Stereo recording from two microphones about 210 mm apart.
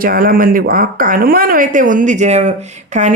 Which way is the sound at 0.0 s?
45° right (ahead or behind).